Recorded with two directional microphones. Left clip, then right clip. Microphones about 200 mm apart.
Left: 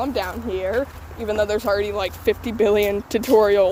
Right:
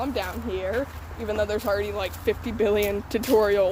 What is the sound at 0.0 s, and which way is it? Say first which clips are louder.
Speech: left 4 dB; 35° left (ahead or behind).